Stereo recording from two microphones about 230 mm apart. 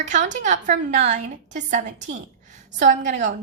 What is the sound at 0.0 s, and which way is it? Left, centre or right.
A woman's voice, right.